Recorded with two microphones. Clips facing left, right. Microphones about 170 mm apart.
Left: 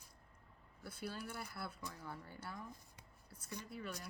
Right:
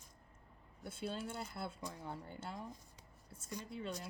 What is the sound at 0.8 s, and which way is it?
Speech, 25° right (ahead or behind).